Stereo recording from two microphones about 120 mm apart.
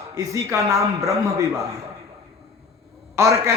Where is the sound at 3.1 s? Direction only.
25° right (ahead or behind).